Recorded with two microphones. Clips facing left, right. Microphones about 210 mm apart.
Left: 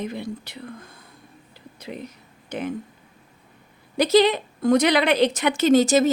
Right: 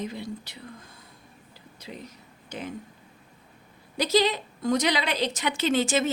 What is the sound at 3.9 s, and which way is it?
A woman's voice, 55° left (ahead or behind).